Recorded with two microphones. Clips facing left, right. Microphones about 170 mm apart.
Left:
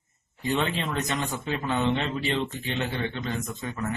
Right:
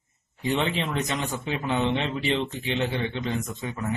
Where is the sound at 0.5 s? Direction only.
20° right (ahead or behind).